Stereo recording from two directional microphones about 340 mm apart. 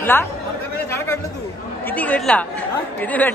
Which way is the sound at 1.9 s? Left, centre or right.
Centre.